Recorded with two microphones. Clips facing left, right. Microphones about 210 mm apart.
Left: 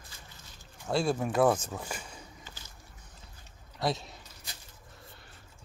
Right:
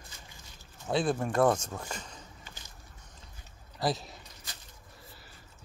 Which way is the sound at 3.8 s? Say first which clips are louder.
Even; centre (ahead or behind).